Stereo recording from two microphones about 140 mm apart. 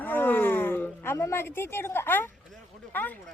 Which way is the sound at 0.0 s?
15° left (ahead or behind).